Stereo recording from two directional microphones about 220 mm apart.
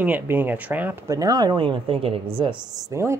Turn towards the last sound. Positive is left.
turn(degrees=-15)  # may be behind; listen again after turning